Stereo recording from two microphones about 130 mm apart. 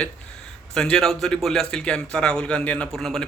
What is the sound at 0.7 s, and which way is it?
A man's voice, 5° left (ahead or behind).